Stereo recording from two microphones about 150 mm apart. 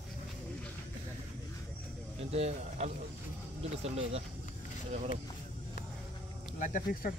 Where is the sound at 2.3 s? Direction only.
45° right (ahead or behind).